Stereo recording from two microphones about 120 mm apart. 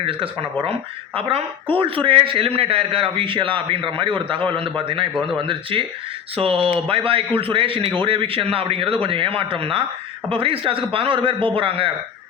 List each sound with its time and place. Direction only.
0.0 s a man's voice: 50° right (ahead or behind)